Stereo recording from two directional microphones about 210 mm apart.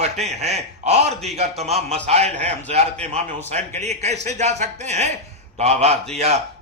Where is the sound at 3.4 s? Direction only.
30° right (ahead or behind).